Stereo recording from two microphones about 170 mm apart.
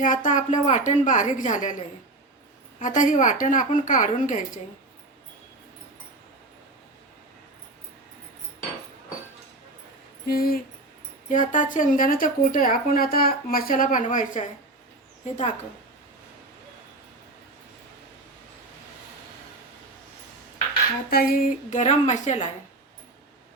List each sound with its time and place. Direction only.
0.0 s a woman's voice: 50° left (ahead or behind)
2.7 s a woman's voice: 50° left (ahead or behind)
10.2 s a sound: 60° left (ahead or behind)
11.3 s a woman's voice: 50° left (ahead or behind)
21.1 s a woman's voice: 60° left (ahead or behind); by 22.4 s 45° left (ahead or behind)